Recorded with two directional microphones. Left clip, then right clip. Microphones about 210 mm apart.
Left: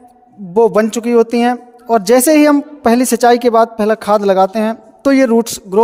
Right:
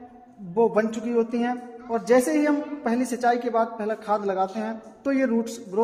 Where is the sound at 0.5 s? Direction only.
50° left (ahead or behind).